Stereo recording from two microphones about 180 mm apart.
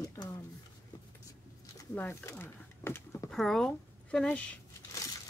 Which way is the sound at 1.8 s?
15° left (ahead or behind).